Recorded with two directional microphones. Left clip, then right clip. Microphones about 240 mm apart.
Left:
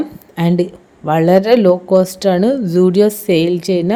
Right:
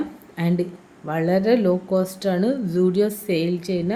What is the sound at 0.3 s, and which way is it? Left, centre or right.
A woman's voice, left.